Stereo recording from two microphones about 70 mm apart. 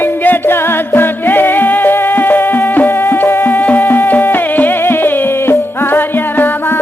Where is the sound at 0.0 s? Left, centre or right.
Left.